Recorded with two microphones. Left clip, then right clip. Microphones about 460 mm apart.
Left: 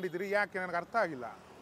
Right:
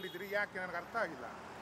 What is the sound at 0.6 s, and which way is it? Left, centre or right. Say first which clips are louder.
Speech: left 6 dB; left.